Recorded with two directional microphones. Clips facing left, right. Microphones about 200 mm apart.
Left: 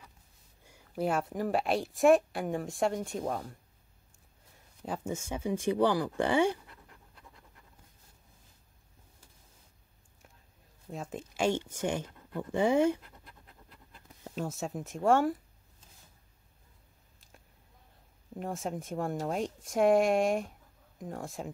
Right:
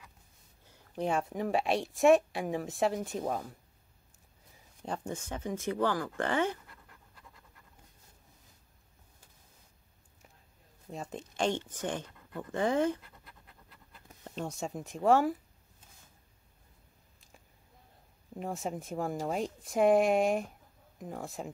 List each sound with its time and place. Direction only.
0.7 s speech: 10° left (ahead or behind)
4.6 s speech: 5° left (ahead or behind)
10.9 s speech: centre (ahead or behind)
14.2 s speech: 5° left (ahead or behind)
18.3 s speech: centre (ahead or behind)